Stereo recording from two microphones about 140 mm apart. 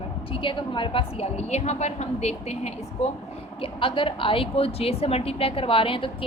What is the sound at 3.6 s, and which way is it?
A woman's voice, 40° left (ahead or behind).